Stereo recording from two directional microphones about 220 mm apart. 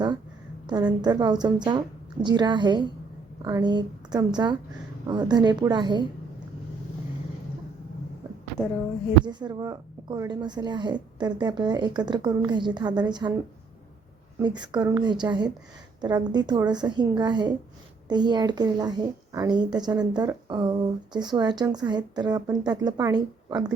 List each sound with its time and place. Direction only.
1.0 s a woman's voice: 20° right (ahead or behind)
9.2 s a woman's voice: 20° right (ahead or behind)
14.3 s a woman's voice: 20° right (ahead or behind)